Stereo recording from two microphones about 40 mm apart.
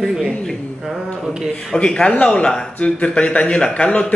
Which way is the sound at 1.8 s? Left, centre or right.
Left.